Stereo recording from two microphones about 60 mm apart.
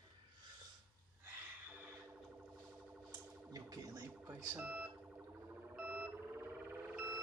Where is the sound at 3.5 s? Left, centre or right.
Right.